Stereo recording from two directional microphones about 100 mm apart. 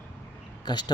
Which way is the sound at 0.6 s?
45° left (ahead or behind).